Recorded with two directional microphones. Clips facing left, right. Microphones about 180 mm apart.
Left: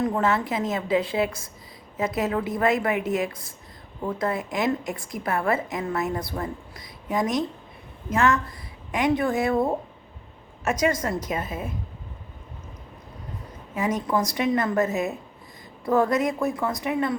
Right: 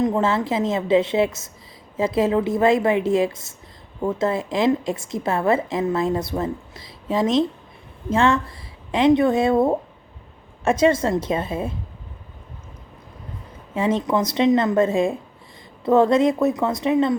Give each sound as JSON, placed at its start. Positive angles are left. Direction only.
{"t": 0.0, "sound": "a woman's voice", "side_deg": -25}
{"t": 13.7, "sound": "a woman's voice", "side_deg": -25}